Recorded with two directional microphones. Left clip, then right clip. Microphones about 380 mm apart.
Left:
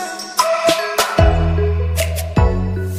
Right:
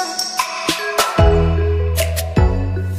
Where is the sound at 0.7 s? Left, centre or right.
Centre.